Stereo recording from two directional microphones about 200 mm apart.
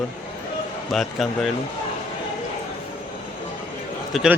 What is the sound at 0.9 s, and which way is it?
Speech, centre (ahead or behind).